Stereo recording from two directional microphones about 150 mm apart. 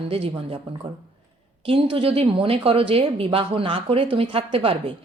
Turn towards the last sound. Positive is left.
turn(degrees=-40)  # may be behind; listen again after turning